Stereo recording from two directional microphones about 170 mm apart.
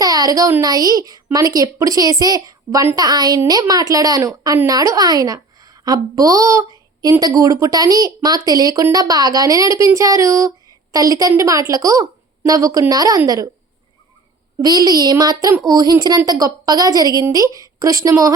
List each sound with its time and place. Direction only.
0.0 s a woman's voice: 20° right (ahead or behind)
14.6 s a woman's voice: 25° right (ahead or behind)